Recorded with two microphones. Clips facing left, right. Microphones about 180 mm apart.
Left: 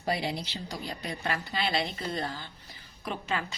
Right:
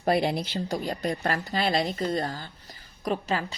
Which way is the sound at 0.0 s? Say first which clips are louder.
Right 7 dB; 55° right (ahead or behind).